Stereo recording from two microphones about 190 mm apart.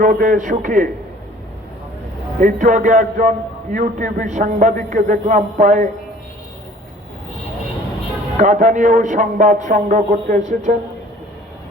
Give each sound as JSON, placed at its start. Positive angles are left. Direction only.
{"t": 0.0, "sound": "a man's voice", "side_deg": -45}
{"t": 2.4, "sound": "a man's voice", "side_deg": -40}
{"t": 8.4, "sound": "a man's voice", "side_deg": -40}